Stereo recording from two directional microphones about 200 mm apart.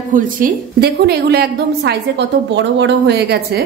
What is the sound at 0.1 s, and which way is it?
A woman's voice, 45° right (ahead or behind).